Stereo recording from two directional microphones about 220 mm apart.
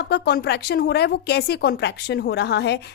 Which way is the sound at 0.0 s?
50° left (ahead or behind).